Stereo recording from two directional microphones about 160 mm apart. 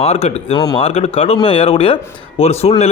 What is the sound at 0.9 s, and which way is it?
A man's voice, 40° left (ahead or behind).